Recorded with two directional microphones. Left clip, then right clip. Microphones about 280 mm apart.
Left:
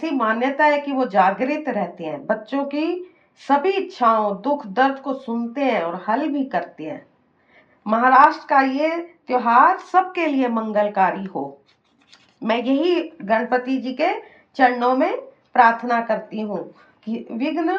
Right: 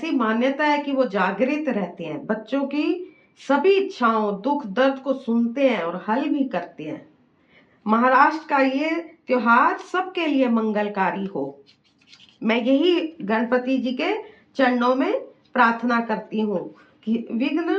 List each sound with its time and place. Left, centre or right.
0.0 s a woman's voice: centre
11.3 s speech: centre
12.4 s a woman's voice: centre